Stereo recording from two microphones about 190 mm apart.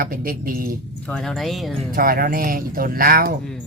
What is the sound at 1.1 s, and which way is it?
Speech, 5° left (ahead or behind).